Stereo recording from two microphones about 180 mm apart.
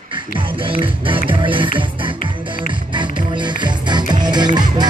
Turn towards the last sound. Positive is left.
turn(degrees=-25)  # may be behind; listen again after turning